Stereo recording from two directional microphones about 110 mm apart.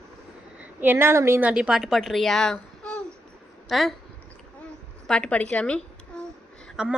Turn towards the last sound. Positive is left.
turn(degrees=-5)  # may be behind; listen again after turning